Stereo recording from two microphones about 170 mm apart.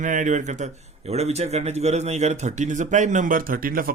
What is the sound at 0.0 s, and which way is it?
Speech, 50° right (ahead or behind).